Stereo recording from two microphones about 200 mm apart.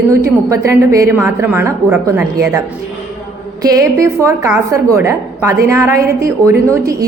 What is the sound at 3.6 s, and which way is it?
A woman's voice, 15° right (ahead or behind).